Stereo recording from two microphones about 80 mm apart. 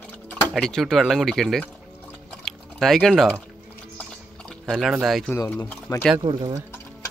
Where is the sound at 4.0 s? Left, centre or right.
Centre.